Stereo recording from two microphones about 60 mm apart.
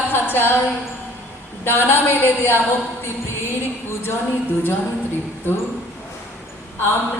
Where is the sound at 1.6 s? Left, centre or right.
Left.